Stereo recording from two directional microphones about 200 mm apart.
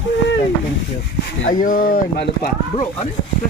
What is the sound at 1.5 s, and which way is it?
Speech, 45° left (ahead or behind).